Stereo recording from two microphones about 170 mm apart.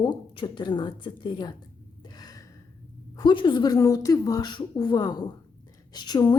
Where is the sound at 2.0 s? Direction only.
25° left (ahead or behind).